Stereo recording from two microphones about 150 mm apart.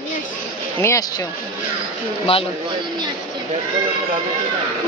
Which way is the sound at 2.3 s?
40° left (ahead or behind).